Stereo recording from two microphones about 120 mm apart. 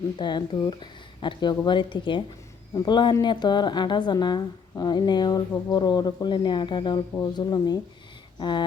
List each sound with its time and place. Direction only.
0.2 s speech: 40° left (ahead or behind)